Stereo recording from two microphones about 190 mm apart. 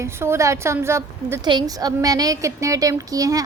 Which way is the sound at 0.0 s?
15° right (ahead or behind).